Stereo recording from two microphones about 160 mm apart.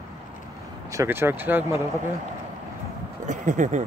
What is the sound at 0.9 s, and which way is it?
Speech, 15° right (ahead or behind).